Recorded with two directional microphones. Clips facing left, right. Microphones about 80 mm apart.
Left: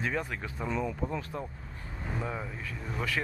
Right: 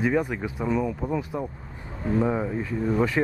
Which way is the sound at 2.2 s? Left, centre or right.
Right.